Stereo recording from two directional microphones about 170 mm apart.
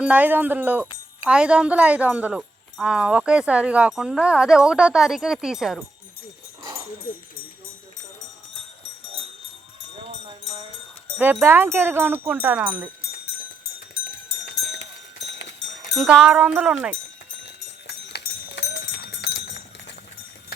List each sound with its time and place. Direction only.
0.0 s speech: 10° right (ahead or behind)
11.2 s speech: 10° right (ahead or behind)
16.0 s speech: 5° right (ahead or behind)
17.8 s a sound: 90° left